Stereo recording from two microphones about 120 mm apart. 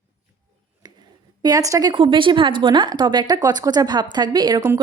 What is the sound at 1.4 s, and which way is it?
Speech, 30° right (ahead or behind).